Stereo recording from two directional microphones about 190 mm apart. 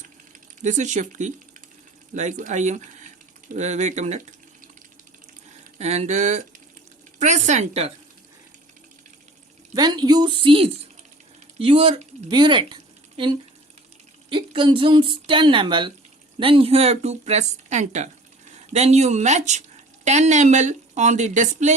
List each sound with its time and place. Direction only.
0.6 s speech: 40° right (ahead or behind)
5.8 s speech: 35° right (ahead or behind)
9.7 s speech: 20° right (ahead or behind); by 21.8 s 40° right (ahead or behind)